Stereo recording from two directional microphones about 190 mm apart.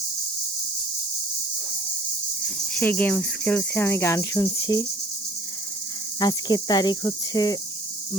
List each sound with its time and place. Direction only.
2.7 s cricket: 10° left (ahead or behind)
6.1 s cricket: 20° left (ahead or behind)